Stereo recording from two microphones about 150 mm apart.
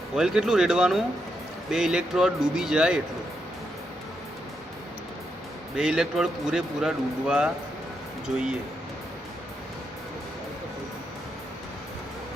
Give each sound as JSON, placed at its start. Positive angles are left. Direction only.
{"t": 0.2, "sound": "a man's voice", "side_deg": -5}
{"t": 5.7, "sound": "a man's voice", "side_deg": -5}